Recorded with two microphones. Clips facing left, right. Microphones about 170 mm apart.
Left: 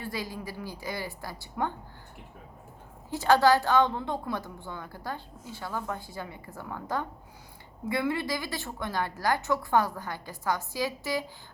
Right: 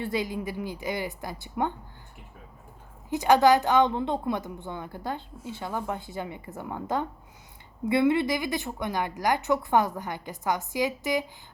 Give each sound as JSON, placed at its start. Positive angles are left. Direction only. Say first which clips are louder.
{"t": 0.0, "sound": "a woman's voice", "louder": "right 6 dB", "side_deg": -20}
{"t": 3.1, "sound": "a woman's voice", "louder": "right 2 dB", "side_deg": -20}